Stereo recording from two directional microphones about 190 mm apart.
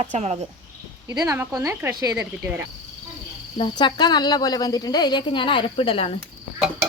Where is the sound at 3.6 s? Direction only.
25° left (ahead or behind).